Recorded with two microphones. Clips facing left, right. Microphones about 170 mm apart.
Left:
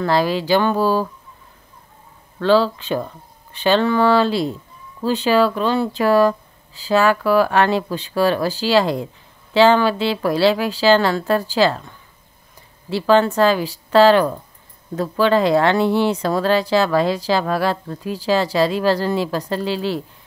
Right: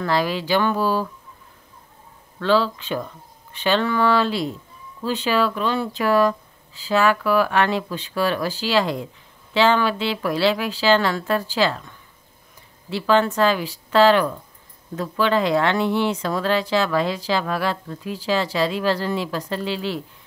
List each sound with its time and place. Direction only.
0.0 s speech: 35° left (ahead or behind)
2.4 s speech: 35° left (ahead or behind)
12.9 s speech: 35° left (ahead or behind)